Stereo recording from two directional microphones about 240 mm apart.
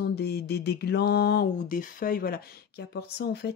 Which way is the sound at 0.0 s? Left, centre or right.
Left.